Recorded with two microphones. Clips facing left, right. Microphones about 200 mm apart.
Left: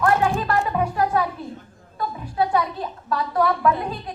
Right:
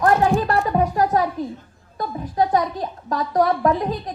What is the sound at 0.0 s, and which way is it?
Music, 40° right (ahead or behind).